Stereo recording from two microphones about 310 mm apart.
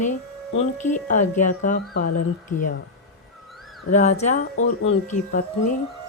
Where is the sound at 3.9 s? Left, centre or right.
Left.